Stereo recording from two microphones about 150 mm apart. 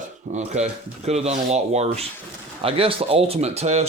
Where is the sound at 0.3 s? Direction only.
50° right (ahead or behind).